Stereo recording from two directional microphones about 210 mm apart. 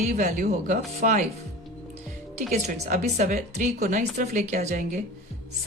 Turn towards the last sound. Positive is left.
turn(degrees=-35)  # may be behind; listen again after turning